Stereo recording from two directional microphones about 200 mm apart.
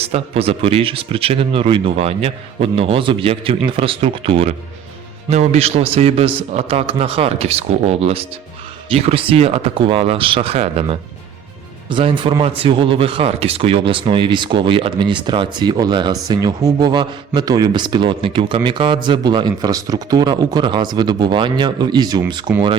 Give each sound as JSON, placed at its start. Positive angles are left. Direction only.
{"t": 0.0, "sound": "a man's voice", "side_deg": -30}